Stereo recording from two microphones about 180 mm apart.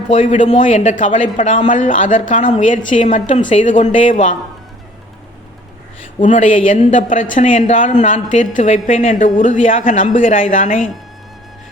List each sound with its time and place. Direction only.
0.1 s speech: 40° left (ahead or behind)
6.2 s speech: 35° left (ahead or behind)